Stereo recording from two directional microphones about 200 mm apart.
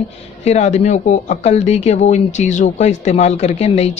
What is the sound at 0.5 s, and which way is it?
Speech, 35° left (ahead or behind).